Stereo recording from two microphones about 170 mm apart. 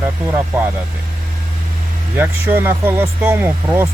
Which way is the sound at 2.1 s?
15° right (ahead or behind).